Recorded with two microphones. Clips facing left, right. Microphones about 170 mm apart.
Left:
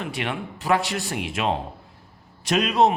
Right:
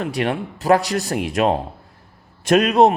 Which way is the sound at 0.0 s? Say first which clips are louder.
Right 7 dB; 40° right (ahead or behind).